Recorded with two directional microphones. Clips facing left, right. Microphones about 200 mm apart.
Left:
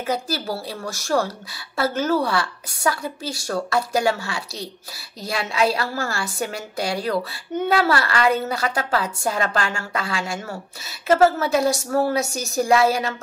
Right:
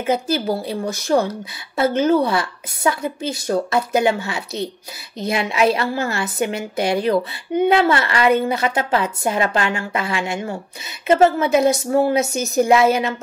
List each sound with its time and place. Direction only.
0.0 s a woman's voice: 20° right (ahead or behind)